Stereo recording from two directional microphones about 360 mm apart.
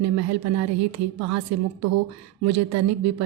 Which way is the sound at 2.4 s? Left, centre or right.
Right.